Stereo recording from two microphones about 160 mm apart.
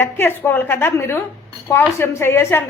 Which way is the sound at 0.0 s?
15° left (ahead or behind).